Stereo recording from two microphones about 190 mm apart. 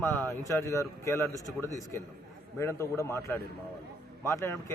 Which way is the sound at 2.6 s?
15° left (ahead or behind).